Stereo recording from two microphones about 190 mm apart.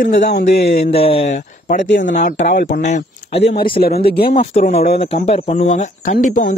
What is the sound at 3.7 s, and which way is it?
Speech, 55° left (ahead or behind).